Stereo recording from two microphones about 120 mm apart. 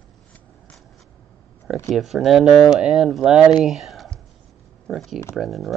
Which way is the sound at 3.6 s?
Centre (ahead or behind).